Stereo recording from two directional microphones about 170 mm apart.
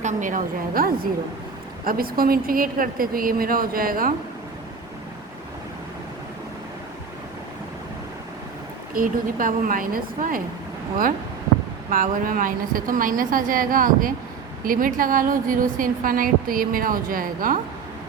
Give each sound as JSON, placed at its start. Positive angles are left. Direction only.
{"t": 0.0, "sound": "a woman's voice", "side_deg": -45}
{"t": 9.0, "sound": "a woman's voice", "side_deg": -55}
{"t": 11.9, "sound": "a woman's voice", "side_deg": -50}